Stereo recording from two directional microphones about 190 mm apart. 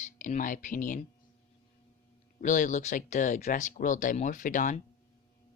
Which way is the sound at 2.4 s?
40° left (ahead or behind).